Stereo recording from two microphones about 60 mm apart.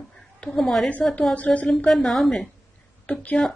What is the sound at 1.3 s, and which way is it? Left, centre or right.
Speech, left.